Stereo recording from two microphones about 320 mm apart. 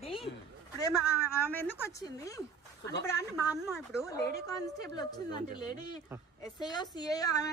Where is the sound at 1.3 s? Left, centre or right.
Centre.